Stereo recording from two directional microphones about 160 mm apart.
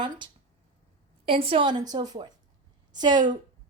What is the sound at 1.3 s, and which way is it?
Speech, 35° right (ahead or behind).